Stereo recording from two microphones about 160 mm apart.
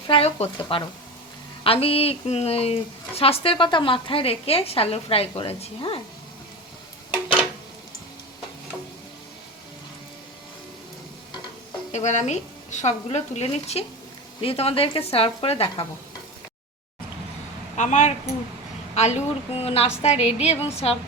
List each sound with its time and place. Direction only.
0.1 s a woman's voice: 40° left (ahead or behind)
11.9 s a woman's voice: 45° left (ahead or behind)
17.7 s a woman's voice: 50° left (ahead or behind)